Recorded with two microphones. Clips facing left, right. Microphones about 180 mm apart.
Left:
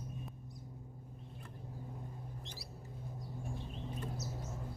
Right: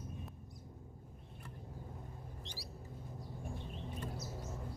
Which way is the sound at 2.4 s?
35° right (ahead or behind).